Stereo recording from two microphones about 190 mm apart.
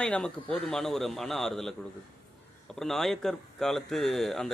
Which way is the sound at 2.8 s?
Centre (ahead or behind).